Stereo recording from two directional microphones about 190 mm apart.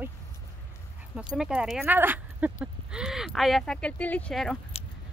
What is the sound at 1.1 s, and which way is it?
Speech, 5° right (ahead or behind).